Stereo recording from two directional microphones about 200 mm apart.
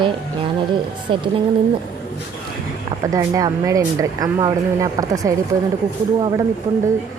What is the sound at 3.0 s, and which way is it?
Speech, 15° right (ahead or behind).